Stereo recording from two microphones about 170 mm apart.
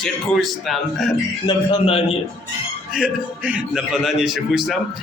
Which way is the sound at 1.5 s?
30° left (ahead or behind).